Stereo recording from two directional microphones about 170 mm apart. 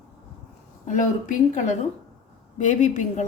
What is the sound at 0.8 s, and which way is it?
A woman's voice, 50° left (ahead or behind).